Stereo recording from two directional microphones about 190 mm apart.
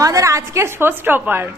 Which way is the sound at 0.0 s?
20° right (ahead or behind).